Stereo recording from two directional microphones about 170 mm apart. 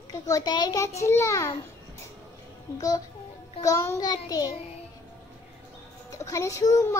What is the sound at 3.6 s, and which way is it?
Speech, 15° left (ahead or behind).